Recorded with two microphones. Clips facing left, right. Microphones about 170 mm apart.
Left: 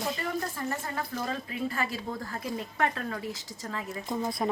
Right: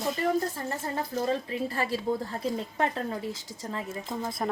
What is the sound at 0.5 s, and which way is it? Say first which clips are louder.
A woman's voice: right 1 dB; 30° right (ahead or behind).